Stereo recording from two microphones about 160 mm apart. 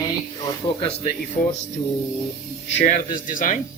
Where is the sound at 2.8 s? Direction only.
55° left (ahead or behind).